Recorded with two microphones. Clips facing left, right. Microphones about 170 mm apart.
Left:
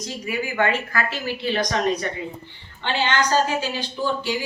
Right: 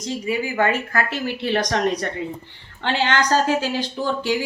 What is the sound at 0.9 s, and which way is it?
A woman's voice, 60° right (ahead or behind).